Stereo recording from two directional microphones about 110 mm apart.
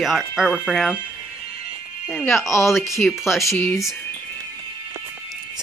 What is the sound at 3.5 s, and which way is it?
Speech, 20° left (ahead or behind).